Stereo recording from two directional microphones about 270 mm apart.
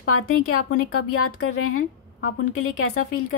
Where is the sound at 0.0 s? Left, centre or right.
Left.